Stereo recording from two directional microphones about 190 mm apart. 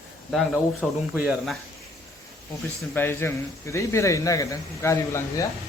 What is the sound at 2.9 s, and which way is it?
A man's voice, 10° left (ahead or behind).